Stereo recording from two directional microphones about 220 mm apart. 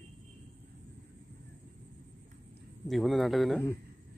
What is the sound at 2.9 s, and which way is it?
Speech, centre (ahead or behind).